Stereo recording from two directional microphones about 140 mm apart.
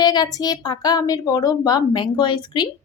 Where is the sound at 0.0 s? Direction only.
30° left (ahead or behind).